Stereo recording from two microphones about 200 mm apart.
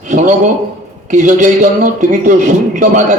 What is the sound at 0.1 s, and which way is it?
A man's voice, 40° right (ahead or behind).